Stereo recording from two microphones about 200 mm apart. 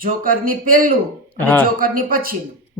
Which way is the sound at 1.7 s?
45° right (ahead or behind).